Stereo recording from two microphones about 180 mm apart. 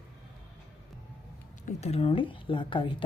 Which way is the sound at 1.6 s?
35° left (ahead or behind).